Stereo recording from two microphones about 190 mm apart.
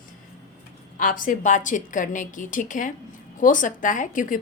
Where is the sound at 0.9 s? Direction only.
45° left (ahead or behind).